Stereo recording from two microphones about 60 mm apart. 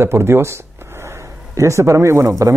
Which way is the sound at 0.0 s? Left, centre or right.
Right.